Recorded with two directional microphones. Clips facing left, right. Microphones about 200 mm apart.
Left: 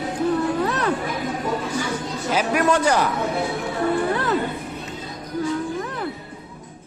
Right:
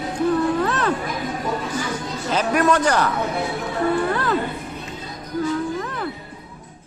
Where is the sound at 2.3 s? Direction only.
10° left (ahead or behind).